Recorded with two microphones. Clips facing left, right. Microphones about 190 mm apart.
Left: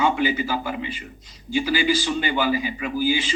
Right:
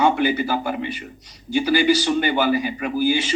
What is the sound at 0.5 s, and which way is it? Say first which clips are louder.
Speech: right 3 dB; 60° right (ahead or behind).